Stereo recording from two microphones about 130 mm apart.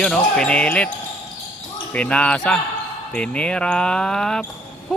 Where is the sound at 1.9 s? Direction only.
10° left (ahead or behind).